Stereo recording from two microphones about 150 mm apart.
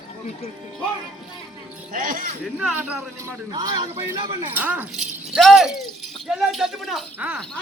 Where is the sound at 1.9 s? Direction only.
70° right (ahead or behind).